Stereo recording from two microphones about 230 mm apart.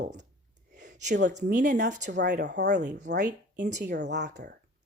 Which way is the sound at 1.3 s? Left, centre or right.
Right.